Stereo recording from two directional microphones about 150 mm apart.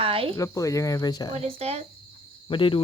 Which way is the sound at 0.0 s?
40° right (ahead or behind).